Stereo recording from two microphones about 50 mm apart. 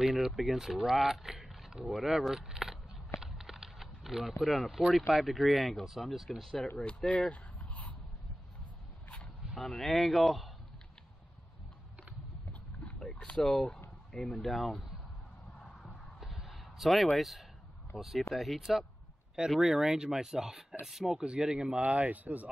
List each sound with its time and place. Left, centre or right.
0.0 s speech: centre
3.2 s a sound: centre
4.4 s speech: centre
7.1 s a sound: left
9.6 s speech: centre
12.8 s boat: centre
13.4 s speech: centre
14.4 s speech: centre
15.9 s a sound: centre
17.9 s speech: centre
21.8 s speech: right